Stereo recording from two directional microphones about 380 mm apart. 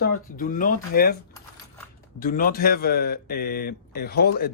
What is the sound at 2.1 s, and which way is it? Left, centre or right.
Speech, left.